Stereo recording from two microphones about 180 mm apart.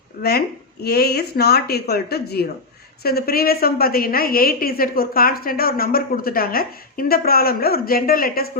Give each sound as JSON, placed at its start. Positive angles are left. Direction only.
{"t": 0.2, "sound": "a woman's voice", "side_deg": 60}